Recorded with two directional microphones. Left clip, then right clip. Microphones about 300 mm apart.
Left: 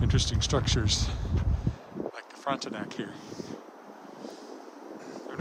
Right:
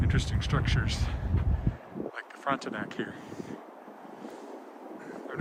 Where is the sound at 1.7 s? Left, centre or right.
Centre.